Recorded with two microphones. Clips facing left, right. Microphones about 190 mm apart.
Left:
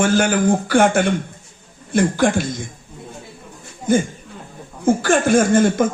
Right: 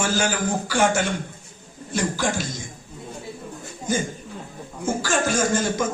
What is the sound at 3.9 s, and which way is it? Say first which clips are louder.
Speech: left 8 dB; 55° left (ahead or behind).